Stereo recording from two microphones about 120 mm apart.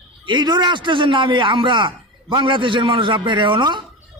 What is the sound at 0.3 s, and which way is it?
A man's voice, 35° right (ahead or behind).